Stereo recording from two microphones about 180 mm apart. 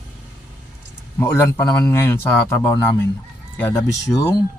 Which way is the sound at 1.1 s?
15° left (ahead or behind).